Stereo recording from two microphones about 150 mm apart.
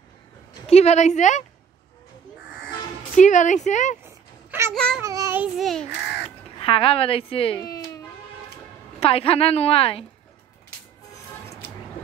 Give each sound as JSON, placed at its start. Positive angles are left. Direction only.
{"t": 0.7, "sound": "a woman's voice", "side_deg": 45}
{"t": 3.2, "sound": "speech", "side_deg": 55}
{"t": 4.0, "sound": "a sound", "side_deg": -15}
{"t": 4.7, "sound": "a child's voice", "side_deg": 5}
{"t": 5.0, "sound": "child singing", "side_deg": -20}
{"t": 5.4, "sound": "a child's voice", "side_deg": 0}
{"t": 6.6, "sound": "a woman's voice", "side_deg": 40}
{"t": 7.5, "sound": "a sound", "side_deg": 25}
{"t": 9.0, "sound": "a woman's voice", "side_deg": 40}